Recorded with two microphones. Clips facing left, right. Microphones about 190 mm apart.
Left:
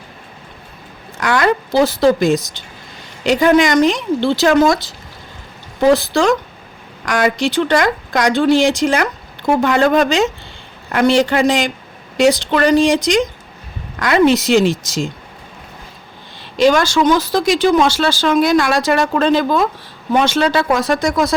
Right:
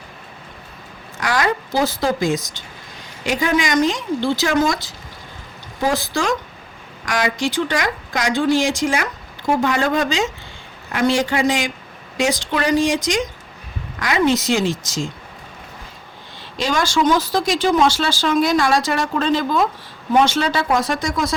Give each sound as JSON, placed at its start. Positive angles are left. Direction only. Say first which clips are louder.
{"t": 1.2, "sound": "speech", "louder": "left 5 dB", "side_deg": 60}
{"t": 5.8, "sound": "speech", "louder": "left 8 dB", "side_deg": 65}
{"t": 16.6, "sound": "speech", "louder": "left 7 dB", "side_deg": 65}